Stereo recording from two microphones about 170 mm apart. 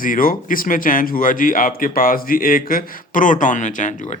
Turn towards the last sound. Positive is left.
turn(degrees=45)  # may be behind; listen again after turning